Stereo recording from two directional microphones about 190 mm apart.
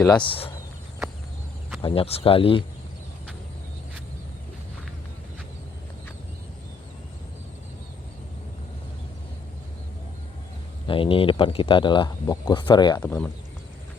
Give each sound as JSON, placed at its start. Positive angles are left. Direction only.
{"t": 0.0, "sound": "speech", "side_deg": 25}
{"t": 1.8, "sound": "speech", "side_deg": 30}
{"t": 10.8, "sound": "speech", "side_deg": 30}
{"t": 13.0, "sound": "speech", "side_deg": 10}